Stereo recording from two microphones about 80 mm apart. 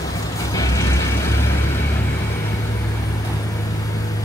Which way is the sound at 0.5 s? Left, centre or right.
Left.